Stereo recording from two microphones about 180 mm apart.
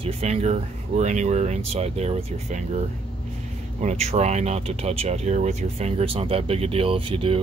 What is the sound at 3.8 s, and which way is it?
Speech, 35° right (ahead or behind).